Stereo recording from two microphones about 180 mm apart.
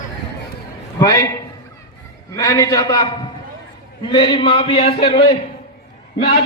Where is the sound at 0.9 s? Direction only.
20° left (ahead or behind).